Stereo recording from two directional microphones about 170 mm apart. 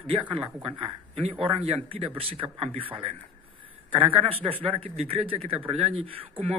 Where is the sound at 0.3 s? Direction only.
30° right (ahead or behind).